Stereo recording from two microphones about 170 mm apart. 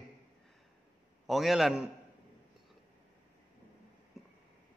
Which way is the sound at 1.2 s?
Centre (ahead or behind).